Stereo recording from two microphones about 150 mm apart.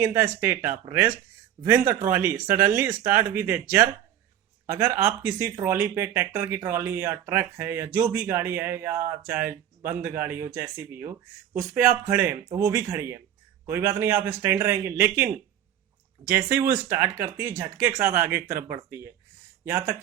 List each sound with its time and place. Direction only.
0.0 s speech: 15° right (ahead or behind)
16.6 s speech: 15° right (ahead or behind)